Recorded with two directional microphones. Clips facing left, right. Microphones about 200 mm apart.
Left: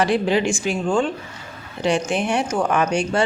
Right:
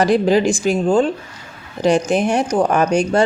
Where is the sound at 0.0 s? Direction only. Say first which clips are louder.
Right 5 dB; 40° right (ahead or behind).